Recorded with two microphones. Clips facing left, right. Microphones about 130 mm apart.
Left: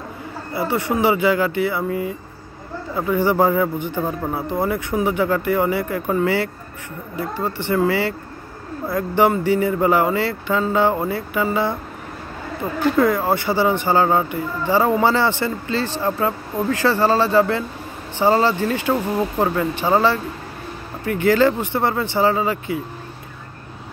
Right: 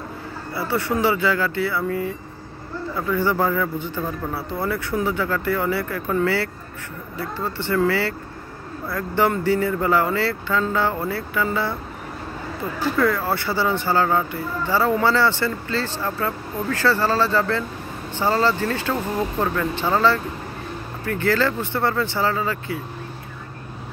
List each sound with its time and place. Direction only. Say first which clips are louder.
0.6 s speech: left 2 dB; 15° left (ahead or behind)
3.2 s speech: left 5 dB; 15° left (ahead or behind)
12.9 s speech: left 3 dB; 20° left (ahead or behind)